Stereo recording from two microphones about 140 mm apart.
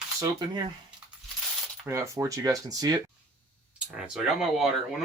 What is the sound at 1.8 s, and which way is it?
Speech, 20° right (ahead or behind).